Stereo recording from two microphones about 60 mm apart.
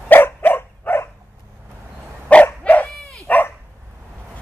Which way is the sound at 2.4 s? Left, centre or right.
Left.